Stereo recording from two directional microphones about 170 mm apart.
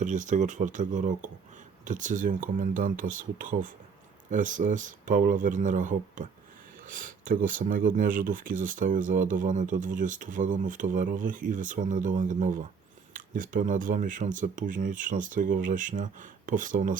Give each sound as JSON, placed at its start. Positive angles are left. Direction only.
{"t": 0.0, "sound": "speech", "side_deg": -50}